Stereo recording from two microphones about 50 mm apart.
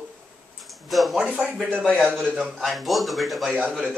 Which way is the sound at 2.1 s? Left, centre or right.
Centre.